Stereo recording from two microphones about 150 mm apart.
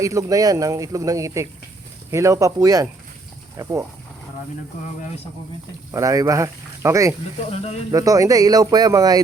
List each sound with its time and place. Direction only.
0.0 s speech: 20° right (ahead or behind)
5.9 s speech: 20° right (ahead or behind)
7.5 s speech: 45° left (ahead or behind)
7.9 s speech: 25° right (ahead or behind)